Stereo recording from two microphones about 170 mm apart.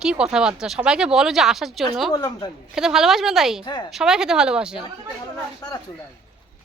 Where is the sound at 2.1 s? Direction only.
20° left (ahead or behind).